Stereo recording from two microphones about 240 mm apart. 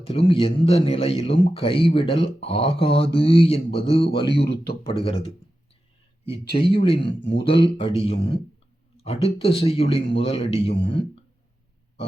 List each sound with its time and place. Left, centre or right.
0.0 s speech: left
4.4 s speech: left
4.8 s speech: left
6.8 s speech: left